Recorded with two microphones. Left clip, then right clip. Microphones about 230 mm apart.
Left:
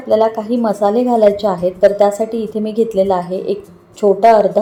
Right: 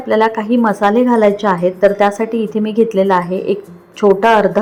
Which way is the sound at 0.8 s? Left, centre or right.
Right.